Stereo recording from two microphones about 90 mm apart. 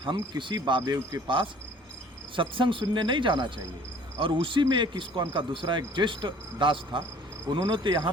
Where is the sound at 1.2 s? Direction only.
65° right (ahead or behind).